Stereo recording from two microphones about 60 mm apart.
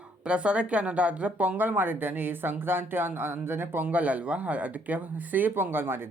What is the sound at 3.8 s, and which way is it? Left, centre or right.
Speech, right.